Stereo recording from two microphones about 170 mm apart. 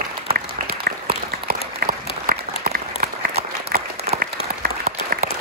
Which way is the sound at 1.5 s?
60° right (ahead or behind).